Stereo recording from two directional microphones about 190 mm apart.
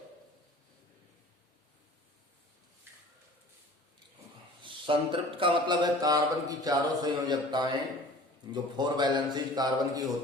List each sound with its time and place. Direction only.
4.6 s speech: 25° right (ahead or behind)